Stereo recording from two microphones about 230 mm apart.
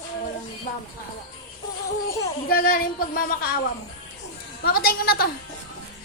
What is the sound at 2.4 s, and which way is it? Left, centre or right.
Speech, left.